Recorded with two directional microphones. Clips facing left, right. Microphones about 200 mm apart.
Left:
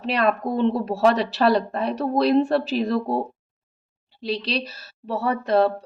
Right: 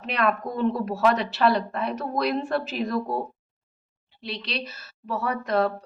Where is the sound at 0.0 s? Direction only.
30° left (ahead or behind).